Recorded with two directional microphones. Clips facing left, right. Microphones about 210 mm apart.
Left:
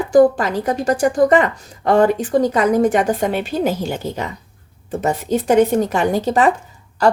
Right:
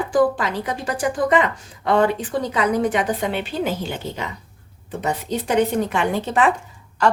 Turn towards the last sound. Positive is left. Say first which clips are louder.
# left 4 dB
turn(degrees=35)  # may be behind; listen again after turning